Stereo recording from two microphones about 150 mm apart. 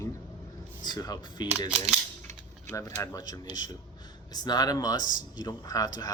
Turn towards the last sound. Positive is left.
turn(degrees=25)  # may be behind; listen again after turning